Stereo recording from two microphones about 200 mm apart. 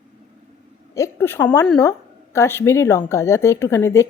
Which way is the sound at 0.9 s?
15° left (ahead or behind).